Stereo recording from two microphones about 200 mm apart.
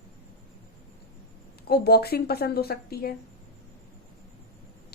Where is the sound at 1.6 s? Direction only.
50° left (ahead or behind).